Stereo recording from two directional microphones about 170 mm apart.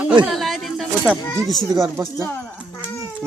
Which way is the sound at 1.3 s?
Centre (ahead or behind).